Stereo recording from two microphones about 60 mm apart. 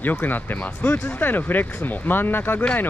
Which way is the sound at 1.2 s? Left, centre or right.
Left.